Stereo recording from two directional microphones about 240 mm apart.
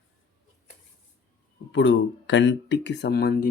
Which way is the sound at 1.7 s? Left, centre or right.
Left.